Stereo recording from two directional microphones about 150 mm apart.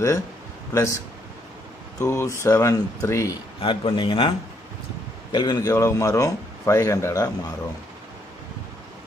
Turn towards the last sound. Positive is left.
turn(degrees=20)  # may be behind; listen again after turning